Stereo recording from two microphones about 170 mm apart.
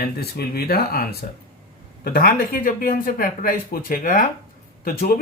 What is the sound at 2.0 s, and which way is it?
A man's voice, 60° left (ahead or behind).